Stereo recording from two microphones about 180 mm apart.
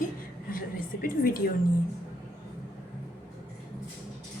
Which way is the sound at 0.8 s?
50° left (ahead or behind).